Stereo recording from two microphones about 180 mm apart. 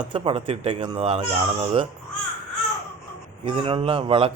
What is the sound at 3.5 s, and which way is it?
Speech, 30° right (ahead or behind).